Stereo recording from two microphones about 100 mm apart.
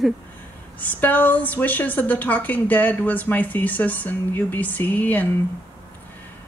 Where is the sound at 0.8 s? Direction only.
15° left (ahead or behind).